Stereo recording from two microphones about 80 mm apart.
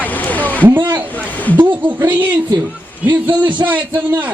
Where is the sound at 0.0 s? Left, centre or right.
Centre.